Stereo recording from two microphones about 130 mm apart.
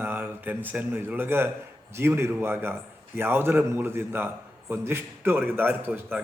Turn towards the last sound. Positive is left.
turn(degrees=-15)  # may be behind; listen again after turning